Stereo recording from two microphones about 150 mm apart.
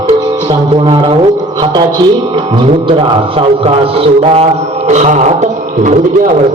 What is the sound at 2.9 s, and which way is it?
Mantra, 35° right (ahead or behind).